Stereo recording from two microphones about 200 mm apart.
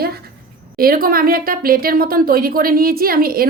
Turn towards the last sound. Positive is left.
turn(degrees=-45)  # may be behind; listen again after turning